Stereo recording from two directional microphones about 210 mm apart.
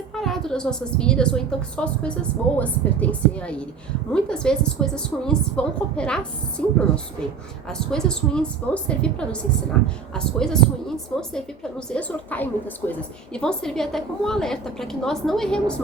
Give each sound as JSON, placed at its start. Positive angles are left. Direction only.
{"t": 0.1, "sound": "a woman's voice", "side_deg": 0}